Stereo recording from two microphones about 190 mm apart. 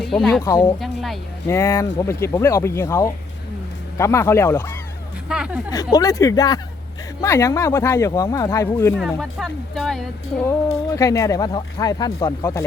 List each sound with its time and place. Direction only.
0.0 s speech: centre (ahead or behind)
0.8 s a sound: centre (ahead or behind)
1.5 s speech: 15° left (ahead or behind)
5.3 s speech: 5° right (ahead or behind)
5.7 s speech: 20° left (ahead or behind)
9.0 s speech: centre (ahead or behind)
10.9 s speech: 15° left (ahead or behind)